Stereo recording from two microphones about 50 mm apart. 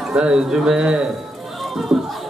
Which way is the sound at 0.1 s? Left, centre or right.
Centre.